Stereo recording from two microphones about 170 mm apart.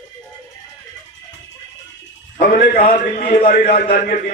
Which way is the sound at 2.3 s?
50° left (ahead or behind).